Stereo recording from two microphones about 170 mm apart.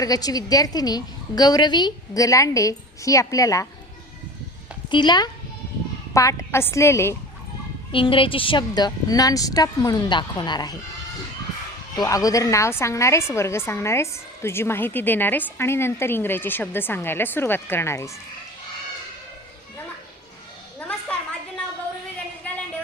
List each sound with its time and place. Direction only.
0.0 s a woman's voice: 20° left (ahead or behind)
4.9 s a woman's voice: 25° left (ahead or behind)
7.9 s a woman's voice: 30° left (ahead or behind)
11.9 s a woman's voice: 20° left (ahead or behind)
20.7 s a sound: 10° left (ahead or behind)